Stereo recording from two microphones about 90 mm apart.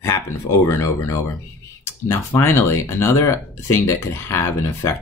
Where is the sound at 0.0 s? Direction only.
30° left (ahead or behind).